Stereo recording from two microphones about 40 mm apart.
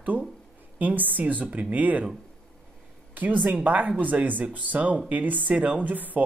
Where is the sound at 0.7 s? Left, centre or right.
Right.